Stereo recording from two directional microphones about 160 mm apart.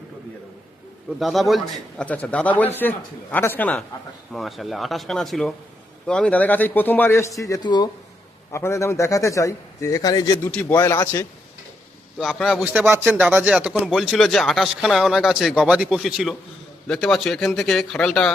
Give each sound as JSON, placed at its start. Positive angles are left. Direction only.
{"t": 1.2, "sound": "a man's voice", "side_deg": 0}
{"t": 10.5, "sound": "speech", "side_deg": 10}
{"t": 12.2, "sound": "speech", "side_deg": 0}
{"t": 12.6, "sound": "speech", "side_deg": -10}